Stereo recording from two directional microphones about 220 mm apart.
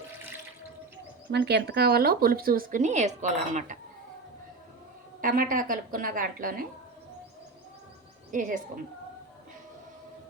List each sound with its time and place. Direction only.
1.3 s speech: 50° right (ahead or behind); by 3.8 s 35° right (ahead or behind)
5.2 s a woman's voice: 40° right (ahead or behind)
8.3 s a woman's voice: 35° right (ahead or behind)